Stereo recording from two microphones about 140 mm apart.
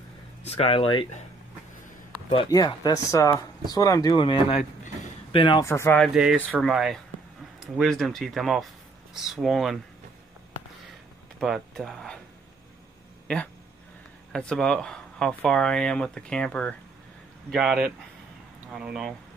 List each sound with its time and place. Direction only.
0.4 s speech: 45° left (ahead or behind)
2.5 s speech: 25° left (ahead or behind)
5.6 s speech: 20° left (ahead or behind)
6.2 s speech: 5° right (ahead or behind)
11.3 s speech: centre (ahead or behind)
14.3 s speech: 5° left (ahead or behind)
17.5 s speech: 5° right (ahead or behind)